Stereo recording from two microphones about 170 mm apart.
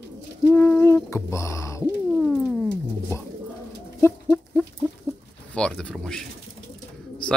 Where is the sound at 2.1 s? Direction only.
5° left (ahead or behind).